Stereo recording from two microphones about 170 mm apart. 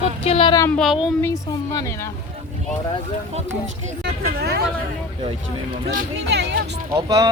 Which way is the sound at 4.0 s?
75° right (ahead or behind).